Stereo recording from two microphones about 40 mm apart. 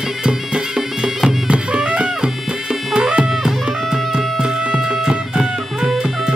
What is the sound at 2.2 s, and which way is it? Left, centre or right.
Music, centre.